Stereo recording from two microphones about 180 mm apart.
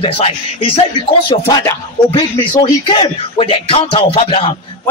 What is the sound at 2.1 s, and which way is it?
Speech, 25° left (ahead or behind).